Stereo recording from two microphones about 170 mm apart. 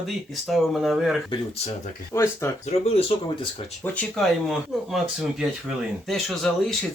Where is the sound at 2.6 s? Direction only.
35° left (ahead or behind).